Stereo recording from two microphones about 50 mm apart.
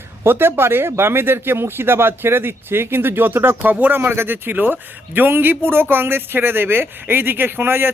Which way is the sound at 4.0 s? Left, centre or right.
Right.